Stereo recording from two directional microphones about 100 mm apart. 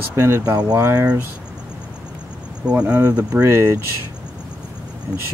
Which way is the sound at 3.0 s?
30° right (ahead or behind).